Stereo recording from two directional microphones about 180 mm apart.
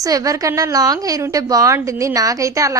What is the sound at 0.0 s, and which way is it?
A woman's voice, 20° right (ahead or behind).